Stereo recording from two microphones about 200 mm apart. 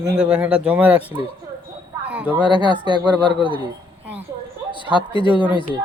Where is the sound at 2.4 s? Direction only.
20° right (ahead or behind).